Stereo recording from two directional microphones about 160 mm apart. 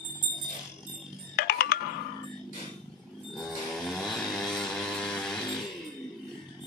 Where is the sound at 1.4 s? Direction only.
70° left (ahead or behind).